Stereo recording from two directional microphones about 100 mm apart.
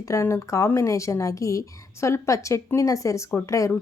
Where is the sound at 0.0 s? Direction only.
30° left (ahead or behind).